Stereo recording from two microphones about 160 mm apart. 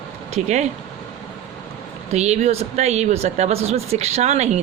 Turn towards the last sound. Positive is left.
turn(degrees=-45)  # may be behind; listen again after turning